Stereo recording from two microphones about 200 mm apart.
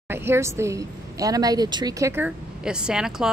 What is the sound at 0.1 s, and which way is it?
Speech, 10° right (ahead or behind).